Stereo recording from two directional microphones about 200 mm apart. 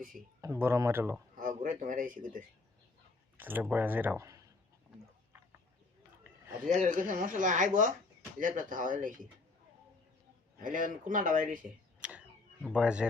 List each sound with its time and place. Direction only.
0.4 s speech: 10° right (ahead or behind)
1.4 s speech: 40° right (ahead or behind)
3.3 s speech: 10° right (ahead or behind)
6.7 s speech: 40° right (ahead or behind)
10.6 s speech: 40° right (ahead or behind)
11.9 s vehicle: 5° right (ahead or behind)
12.6 s speech: 5° right (ahead or behind)